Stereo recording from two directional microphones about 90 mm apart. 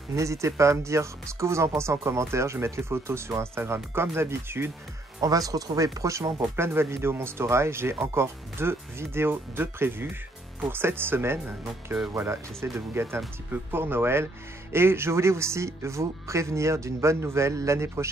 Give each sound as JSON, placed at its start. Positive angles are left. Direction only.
{"t": 0.1, "sound": "speech", "side_deg": -35}
{"t": 5.2, "sound": "speech", "side_deg": -40}